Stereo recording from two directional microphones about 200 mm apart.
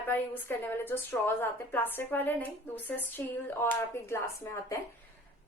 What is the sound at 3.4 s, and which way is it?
A woman's voice, 10° left (ahead or behind).